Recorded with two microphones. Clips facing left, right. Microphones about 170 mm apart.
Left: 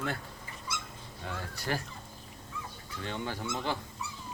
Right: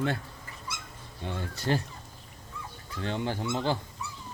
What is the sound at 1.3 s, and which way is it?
Speech, 25° right (ahead or behind).